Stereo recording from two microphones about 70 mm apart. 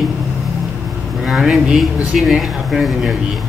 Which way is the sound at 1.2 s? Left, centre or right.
Centre.